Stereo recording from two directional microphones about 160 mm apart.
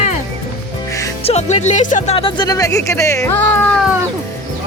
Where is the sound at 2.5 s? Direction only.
20° left (ahead or behind).